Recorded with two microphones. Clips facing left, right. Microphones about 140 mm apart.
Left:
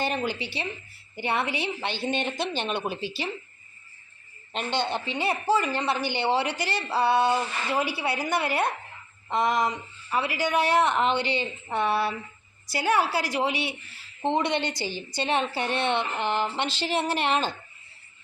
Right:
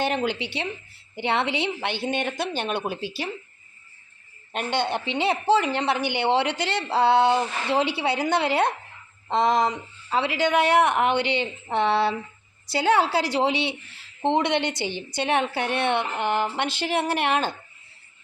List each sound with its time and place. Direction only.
0.0 s a woman's voice: 15° right (ahead or behind)
4.5 s a woman's voice: 15° right (ahead or behind)